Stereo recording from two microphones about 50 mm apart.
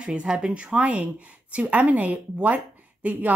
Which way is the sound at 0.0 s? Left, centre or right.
Centre.